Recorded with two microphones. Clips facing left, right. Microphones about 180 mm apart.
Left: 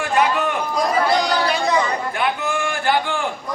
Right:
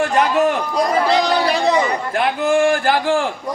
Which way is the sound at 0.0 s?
40° right (ahead or behind).